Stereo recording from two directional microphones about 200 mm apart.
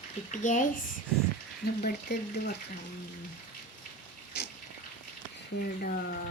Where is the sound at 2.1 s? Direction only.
60° left (ahead or behind).